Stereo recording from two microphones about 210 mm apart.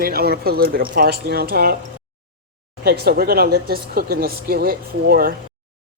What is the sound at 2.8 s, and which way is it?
Speech, 45° right (ahead or behind).